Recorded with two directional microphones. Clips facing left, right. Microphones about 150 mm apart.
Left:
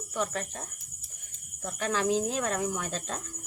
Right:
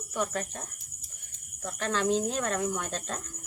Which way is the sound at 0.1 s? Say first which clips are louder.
Right 1 dB; centre (ahead or behind).